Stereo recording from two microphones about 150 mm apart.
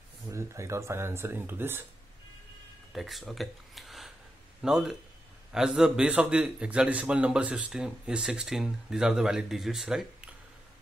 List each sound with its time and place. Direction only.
0.3 s speech: 20° right (ahead or behind)
2.9 s a man's voice: centre (ahead or behind)